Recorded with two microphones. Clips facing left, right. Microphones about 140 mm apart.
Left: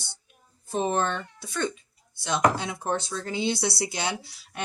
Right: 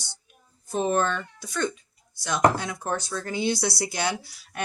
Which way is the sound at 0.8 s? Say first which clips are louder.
Right 2 dB; 20° left (ahead or behind).